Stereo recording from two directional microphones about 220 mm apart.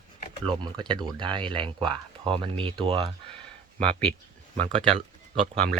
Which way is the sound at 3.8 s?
5° left (ahead or behind).